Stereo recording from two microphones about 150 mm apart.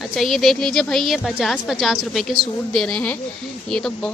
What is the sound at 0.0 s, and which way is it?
A woman's voice, centre (ahead or behind).